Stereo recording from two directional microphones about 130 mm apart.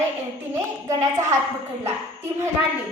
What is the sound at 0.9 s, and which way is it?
Speech, 25° right (ahead or behind).